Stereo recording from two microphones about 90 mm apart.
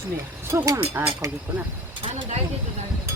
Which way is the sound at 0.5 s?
40° right (ahead or behind).